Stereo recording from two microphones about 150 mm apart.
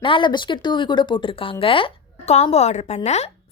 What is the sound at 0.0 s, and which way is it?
Speech, 35° left (ahead or behind).